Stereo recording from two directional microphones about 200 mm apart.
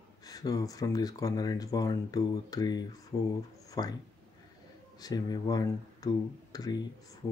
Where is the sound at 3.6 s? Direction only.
20° left (ahead or behind).